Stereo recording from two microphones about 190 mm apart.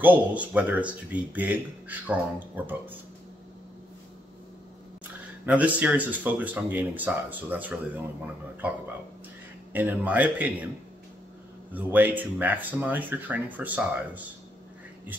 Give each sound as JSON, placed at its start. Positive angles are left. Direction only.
{"t": 0.0, "sound": "speech", "side_deg": -10}
{"t": 5.4, "sound": "speech", "side_deg": -10}
{"t": 11.7, "sound": "speech", "side_deg": -10}